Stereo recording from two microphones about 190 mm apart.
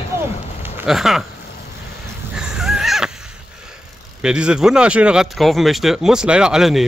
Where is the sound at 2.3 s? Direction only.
5° right (ahead or behind).